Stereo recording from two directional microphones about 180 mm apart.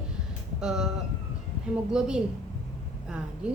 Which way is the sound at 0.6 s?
5° right (ahead or behind).